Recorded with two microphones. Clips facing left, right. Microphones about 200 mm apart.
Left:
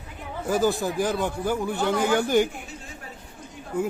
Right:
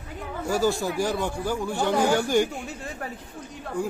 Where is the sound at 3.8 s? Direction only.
5° left (ahead or behind).